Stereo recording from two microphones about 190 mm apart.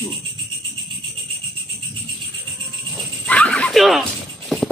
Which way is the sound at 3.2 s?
5° left (ahead or behind).